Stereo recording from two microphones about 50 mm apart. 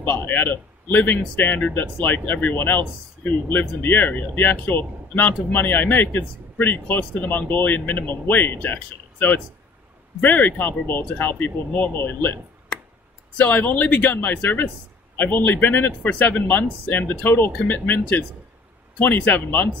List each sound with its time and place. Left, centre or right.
0.0 s speech: left
10.2 s speech: left
13.4 s speech: left